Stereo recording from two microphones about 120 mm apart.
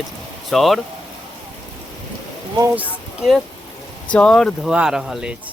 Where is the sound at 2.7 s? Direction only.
10° right (ahead or behind).